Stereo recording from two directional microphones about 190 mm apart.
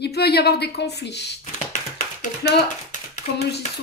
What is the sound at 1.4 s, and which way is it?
Tap, 40° left (ahead or behind).